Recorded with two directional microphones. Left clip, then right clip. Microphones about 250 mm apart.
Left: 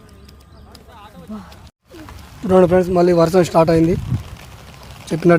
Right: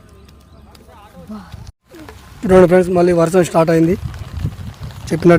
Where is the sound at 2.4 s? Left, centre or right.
Right.